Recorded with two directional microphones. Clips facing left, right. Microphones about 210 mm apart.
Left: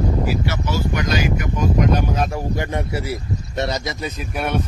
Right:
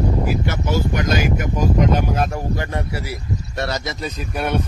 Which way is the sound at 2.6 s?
20° left (ahead or behind).